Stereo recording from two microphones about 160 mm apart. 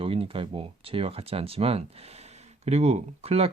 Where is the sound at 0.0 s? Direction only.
35° right (ahead or behind).